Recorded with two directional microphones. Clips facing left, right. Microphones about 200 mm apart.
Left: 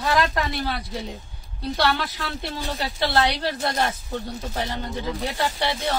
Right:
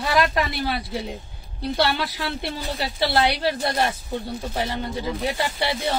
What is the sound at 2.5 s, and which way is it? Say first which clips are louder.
Speech: even; 10° right (ahead or behind).